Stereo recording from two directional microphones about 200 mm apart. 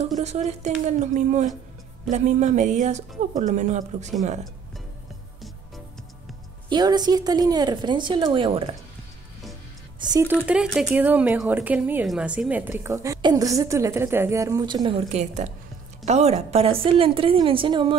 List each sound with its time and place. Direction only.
0.2 s a woman's voice: 35° right (ahead or behind)
6.7 s a woman's voice: 20° right (ahead or behind)
9.9 s speech: 15° right (ahead or behind)
10.4 s a woman's voice: 5° right (ahead or behind); by 17.9 s 25° right (ahead or behind)